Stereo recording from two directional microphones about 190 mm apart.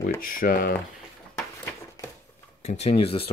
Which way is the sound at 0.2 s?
45° left (ahead or behind).